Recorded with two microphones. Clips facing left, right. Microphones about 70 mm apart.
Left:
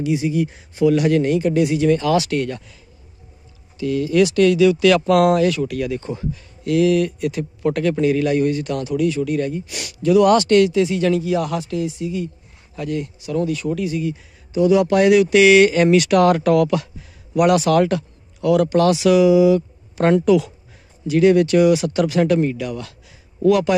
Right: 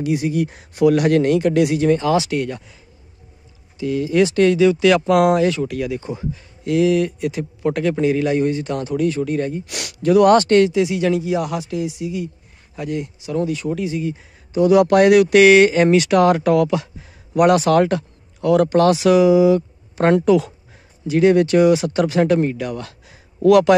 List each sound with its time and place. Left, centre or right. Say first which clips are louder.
0.0 s speech: even; right
1.8 s speech: even; right
9.7 s speech: right 1 dB; right
10.0 s speech: right 1 dB; right
10.7 s speech: even; centre
14.5 s speech: right 2 dB; right
15.5 s speech: even; right
21.1 s speech: even; right
23.4 s speech: right 4 dB; right